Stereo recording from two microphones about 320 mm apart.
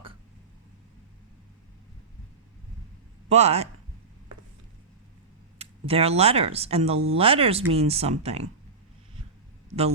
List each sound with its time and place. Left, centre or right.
3.2 s speech: centre
5.5 s speech: centre